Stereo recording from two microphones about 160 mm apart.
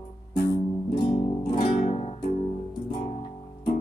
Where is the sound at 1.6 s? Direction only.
45° left (ahead or behind).